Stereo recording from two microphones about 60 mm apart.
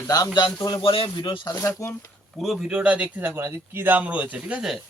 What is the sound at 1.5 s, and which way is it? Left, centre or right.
Speech, left.